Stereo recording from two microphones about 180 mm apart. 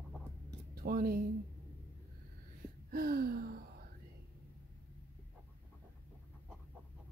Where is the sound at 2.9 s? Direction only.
60° right (ahead or behind).